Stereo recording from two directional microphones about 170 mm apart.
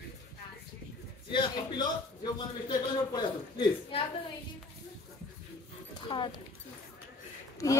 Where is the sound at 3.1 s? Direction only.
25° left (ahead or behind).